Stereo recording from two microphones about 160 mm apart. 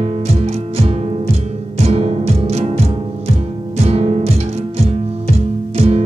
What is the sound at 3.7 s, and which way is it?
Music, 40° right (ahead or behind).